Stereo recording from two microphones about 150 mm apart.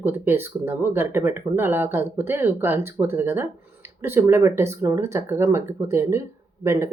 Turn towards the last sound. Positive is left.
turn(degrees=-20)  # may be behind; listen again after turning